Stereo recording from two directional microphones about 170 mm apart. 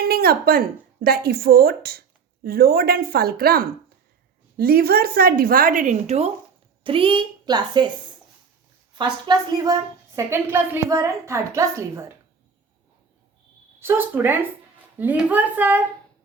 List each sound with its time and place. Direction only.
0.0 s a woman's voice: 65° right (ahead or behind); by 7.9 s 25° right (ahead or behind)
9.2 s a woman's voice: 25° right (ahead or behind)
13.7 s a woman's voice: 15° right (ahead or behind)